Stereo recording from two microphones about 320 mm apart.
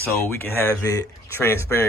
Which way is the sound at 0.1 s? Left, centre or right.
Centre.